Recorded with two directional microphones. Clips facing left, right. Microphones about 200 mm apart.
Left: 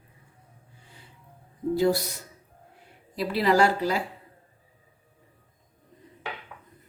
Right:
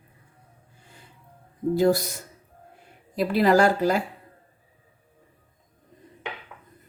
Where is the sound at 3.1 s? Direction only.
50° right (ahead or behind).